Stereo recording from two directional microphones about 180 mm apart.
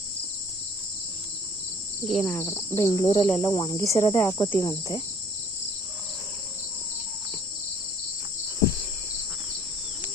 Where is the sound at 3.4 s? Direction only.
25° left (ahead or behind).